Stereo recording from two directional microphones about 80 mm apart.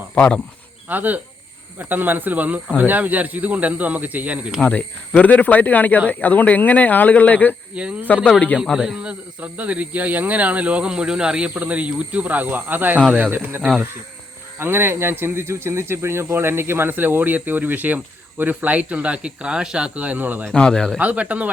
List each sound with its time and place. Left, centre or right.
0.1 s speech: centre
0.9 s speech: right
4.6 s speech: centre
7.8 s speech: centre
8.0 s speech: centre
8.5 s speech: centre; by 13.6 s right
13.6 s speech: centre
14.6 s speech: right
20.5 s a man's voice: centre
21.0 s speech: centre